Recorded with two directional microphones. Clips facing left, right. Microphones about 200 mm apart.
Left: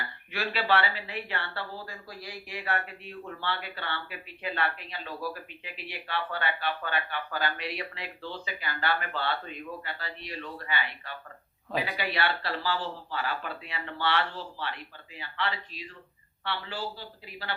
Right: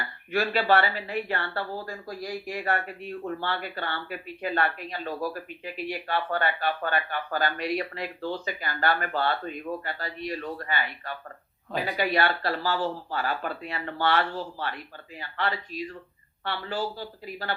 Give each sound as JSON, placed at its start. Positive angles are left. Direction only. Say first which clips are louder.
{"t": 0.3, "sound": "speech", "louder": "right 5 dB", "side_deg": -45}